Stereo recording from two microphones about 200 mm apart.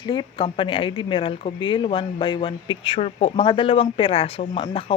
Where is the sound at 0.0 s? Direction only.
20° left (ahead or behind).